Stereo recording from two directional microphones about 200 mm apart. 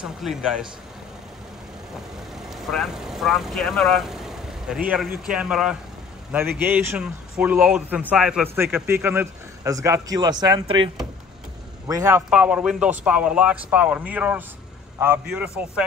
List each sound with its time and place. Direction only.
0.0 s speech: centre (ahead or behind)
2.4 s a man's voice: centre (ahead or behind); by 10.9 s 20° right (ahead or behind)
11.9 s a man's voice: 15° right (ahead or behind)
12.3 s speech: 5° right (ahead or behind)